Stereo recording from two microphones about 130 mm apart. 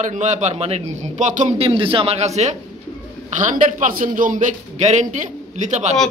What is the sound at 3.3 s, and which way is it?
A man's voice, 80° right.